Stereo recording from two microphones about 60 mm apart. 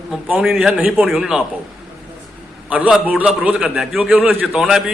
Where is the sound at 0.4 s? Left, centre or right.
Centre.